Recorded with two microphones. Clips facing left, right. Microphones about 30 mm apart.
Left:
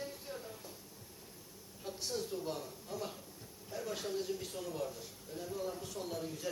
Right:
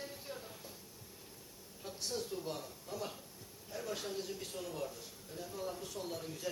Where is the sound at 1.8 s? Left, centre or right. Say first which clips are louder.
Left 1 dB; centre.